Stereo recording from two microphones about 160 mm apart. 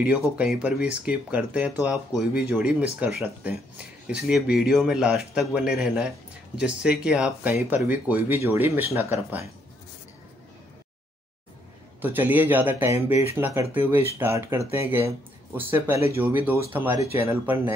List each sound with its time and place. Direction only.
0.0 s a man's voice: 5° right (ahead or behind)
12.0 s speech: 10° right (ahead or behind)